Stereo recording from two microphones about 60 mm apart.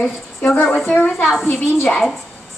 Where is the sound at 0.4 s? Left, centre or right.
Left.